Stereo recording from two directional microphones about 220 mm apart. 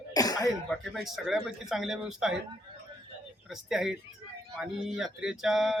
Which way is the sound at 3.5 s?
Centre (ahead or behind).